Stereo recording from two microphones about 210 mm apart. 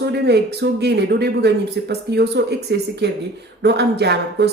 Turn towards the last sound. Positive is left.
turn(degrees=-50)  # may be behind; listen again after turning